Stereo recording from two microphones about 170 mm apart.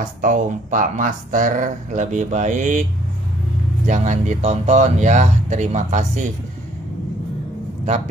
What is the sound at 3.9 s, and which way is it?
Speech, 45° right (ahead or behind).